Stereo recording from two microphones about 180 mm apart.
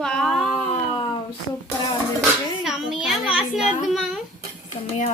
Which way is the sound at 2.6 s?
Centre (ahead or behind).